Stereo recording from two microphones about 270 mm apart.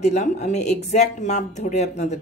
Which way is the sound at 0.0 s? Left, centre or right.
Left.